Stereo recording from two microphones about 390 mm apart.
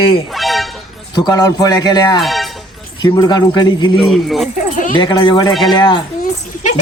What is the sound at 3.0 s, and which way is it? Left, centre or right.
Speech, centre.